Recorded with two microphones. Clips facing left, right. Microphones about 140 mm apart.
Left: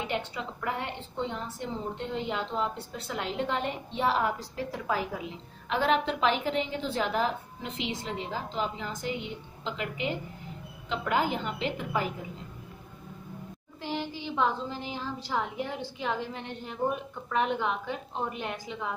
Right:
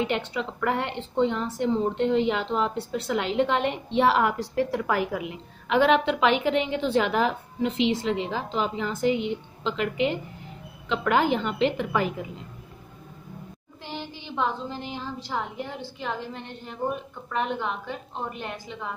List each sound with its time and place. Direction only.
0.0 s a woman's voice: 80° right
14.3 s a woman's voice: centre (ahead or behind)